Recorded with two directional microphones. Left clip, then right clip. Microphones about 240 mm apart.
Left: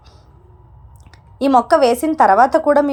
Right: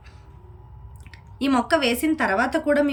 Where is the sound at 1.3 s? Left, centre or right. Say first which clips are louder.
Left 9 dB; centre.